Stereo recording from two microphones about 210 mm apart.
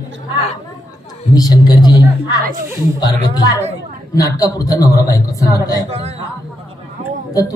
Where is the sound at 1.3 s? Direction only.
20° left (ahead or behind).